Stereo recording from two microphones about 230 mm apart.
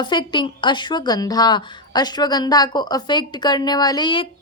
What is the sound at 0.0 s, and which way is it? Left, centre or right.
A woman's voice, centre.